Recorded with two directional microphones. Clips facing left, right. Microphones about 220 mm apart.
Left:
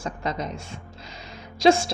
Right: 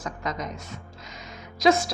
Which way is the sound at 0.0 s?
30° left (ahead or behind).